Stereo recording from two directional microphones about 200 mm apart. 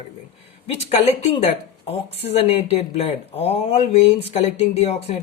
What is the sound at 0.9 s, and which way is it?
Speech, 30° left (ahead or behind).